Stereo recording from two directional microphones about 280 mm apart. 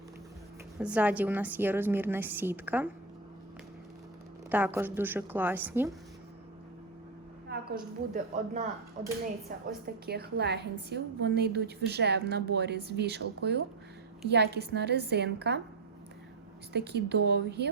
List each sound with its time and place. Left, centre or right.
0.8 s a woman's voice: centre
4.5 s a woman's voice: centre
7.5 s a woman's voice: right
16.7 s a woman's voice: right